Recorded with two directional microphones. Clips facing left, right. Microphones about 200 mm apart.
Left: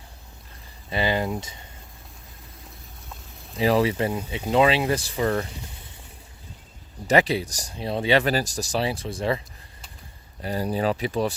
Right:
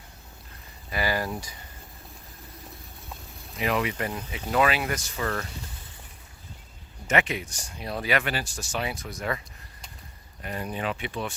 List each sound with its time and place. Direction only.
0.9 s speech: 25° left (ahead or behind)
3.6 s speech: 35° left (ahead or behind)
7.1 s speech: 35° left (ahead or behind)
10.4 s speech: 35° left (ahead or behind)